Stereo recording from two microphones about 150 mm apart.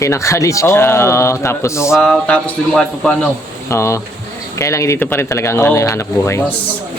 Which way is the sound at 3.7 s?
20° left (ahead or behind).